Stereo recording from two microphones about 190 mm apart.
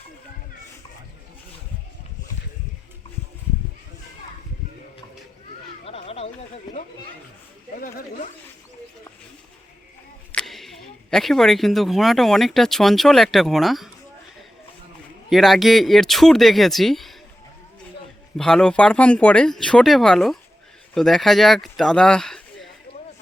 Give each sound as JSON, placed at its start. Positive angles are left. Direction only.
{"t": 5.8, "sound": "a sound", "side_deg": 30}
{"t": 7.8, "sound": "speech", "side_deg": 45}
{"t": 10.3, "sound": "speech", "side_deg": 0}
{"t": 15.3, "sound": "speech", "side_deg": 0}
{"t": 18.3, "sound": "speech", "side_deg": 5}